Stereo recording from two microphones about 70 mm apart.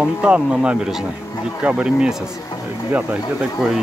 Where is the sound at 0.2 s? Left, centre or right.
Centre.